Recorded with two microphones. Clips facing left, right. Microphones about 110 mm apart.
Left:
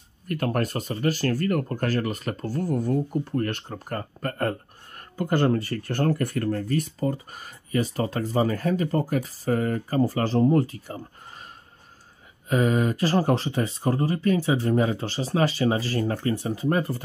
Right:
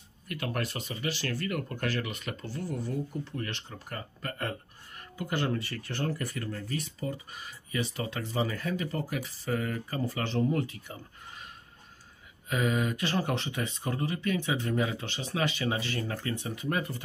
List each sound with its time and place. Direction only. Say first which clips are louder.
0.3 s speech: left 8 dB; 45° left (ahead or behind)
12.4 s speech: left 7 dB; 40° left (ahead or behind)